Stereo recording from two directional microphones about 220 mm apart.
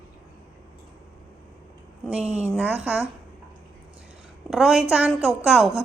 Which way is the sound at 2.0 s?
5° right (ahead or behind).